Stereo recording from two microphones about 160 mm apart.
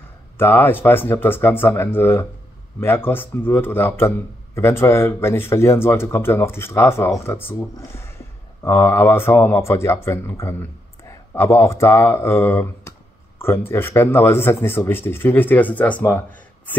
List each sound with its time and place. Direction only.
0.4 s speech: 15° left (ahead or behind)